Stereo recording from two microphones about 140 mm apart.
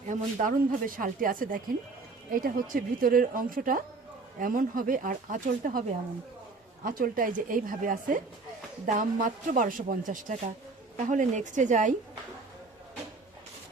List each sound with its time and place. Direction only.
0.0 s speech: 60° right (ahead or behind)
2.3 s a woman's voice: 90° right; by 5.8 s 75° right (ahead or behind)
6.8 s a woman's voice: 85° right; by 11.9 s 65° right (ahead or behind)